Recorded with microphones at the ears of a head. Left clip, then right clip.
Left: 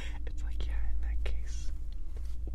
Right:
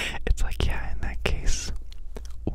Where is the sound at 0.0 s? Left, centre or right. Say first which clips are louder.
Right 17 dB; right.